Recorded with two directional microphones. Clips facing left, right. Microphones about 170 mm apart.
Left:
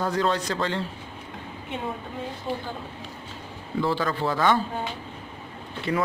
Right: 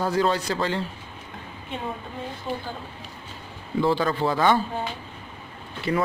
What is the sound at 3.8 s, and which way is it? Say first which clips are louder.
Speech: right 3 dB; 20° right (ahead or behind).